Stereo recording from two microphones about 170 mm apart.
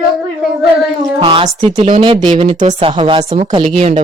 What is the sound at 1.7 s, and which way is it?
Speech, 45° right (ahead or behind).